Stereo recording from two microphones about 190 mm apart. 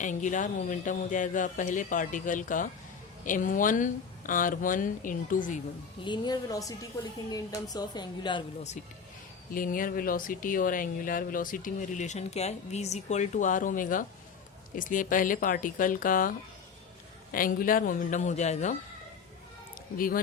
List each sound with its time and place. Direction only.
0.0 s speech: 40° left (ahead or behind)
6.1 s a woman's voice: 20° left (ahead or behind)
9.5 s speech: 45° left (ahead or behind)
17.3 s speech: 45° left (ahead or behind)
20.0 s speech: 50° left (ahead or behind)